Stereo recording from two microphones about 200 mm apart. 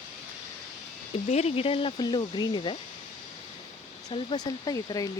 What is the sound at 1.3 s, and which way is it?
Speech, 30° left (ahead or behind).